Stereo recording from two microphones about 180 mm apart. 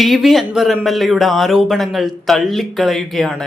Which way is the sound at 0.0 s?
Centre (ahead or behind).